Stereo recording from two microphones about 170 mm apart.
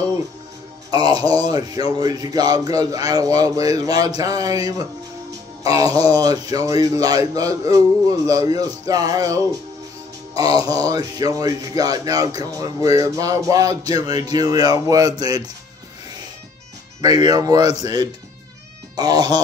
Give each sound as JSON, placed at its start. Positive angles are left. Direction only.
{"t": 0.9, "sound": "a man's voice", "side_deg": -25}
{"t": 5.6, "sound": "music", "side_deg": -20}
{"t": 6.0, "sound": "speech", "side_deg": -20}
{"t": 17.0, "sound": "speech", "side_deg": -25}